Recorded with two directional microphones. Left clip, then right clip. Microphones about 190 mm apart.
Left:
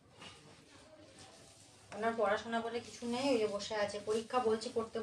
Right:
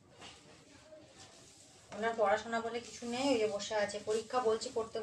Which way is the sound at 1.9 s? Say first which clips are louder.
Right 2 dB; 15° left (ahead or behind).